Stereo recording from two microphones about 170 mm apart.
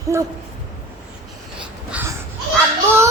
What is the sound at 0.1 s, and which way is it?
Speech, 15° right (ahead or behind).